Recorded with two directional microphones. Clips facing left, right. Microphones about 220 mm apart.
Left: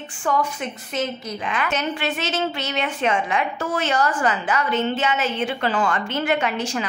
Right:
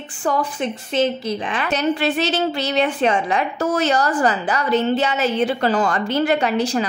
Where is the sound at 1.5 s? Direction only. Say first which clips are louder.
Right 3 dB; 35° right (ahead or behind).